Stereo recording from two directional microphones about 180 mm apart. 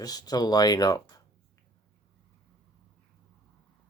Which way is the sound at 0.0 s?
20° left (ahead or behind).